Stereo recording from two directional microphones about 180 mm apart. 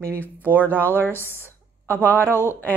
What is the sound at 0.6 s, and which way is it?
Speech, 10° left (ahead or behind).